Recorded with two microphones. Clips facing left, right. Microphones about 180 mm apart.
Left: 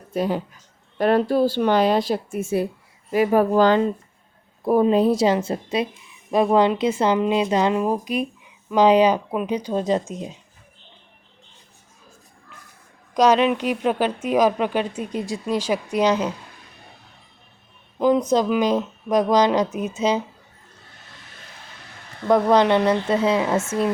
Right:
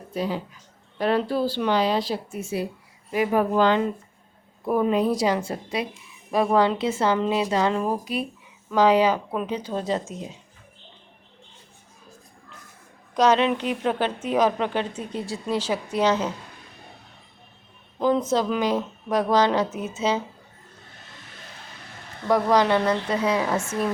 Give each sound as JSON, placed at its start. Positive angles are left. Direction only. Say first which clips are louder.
{"t": 0.1, "sound": "speech", "louder": "left 4 dB", "side_deg": 50}
{"t": 3.1, "sound": "a woman's voice", "louder": "left 4 dB", "side_deg": 40}
{"t": 13.1, "sound": "speech", "louder": "left 3 dB", "side_deg": 15}
{"t": 18.0, "sound": "speech", "louder": "left 3 dB", "side_deg": 15}
{"t": 22.3, "sound": "a woman's voice", "louder": "left 3 dB", "side_deg": 20}